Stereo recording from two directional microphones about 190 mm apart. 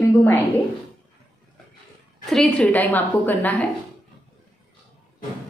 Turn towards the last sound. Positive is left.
turn(degrees=10)  # may be behind; listen again after turning